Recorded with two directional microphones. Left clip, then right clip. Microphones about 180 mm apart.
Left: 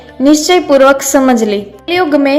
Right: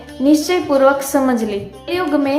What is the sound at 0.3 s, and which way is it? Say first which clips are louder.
A woman's voice: left 7 dB; 35° left (ahead or behind).